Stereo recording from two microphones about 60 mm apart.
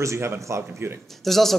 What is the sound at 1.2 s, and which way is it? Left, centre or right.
Speech, centre.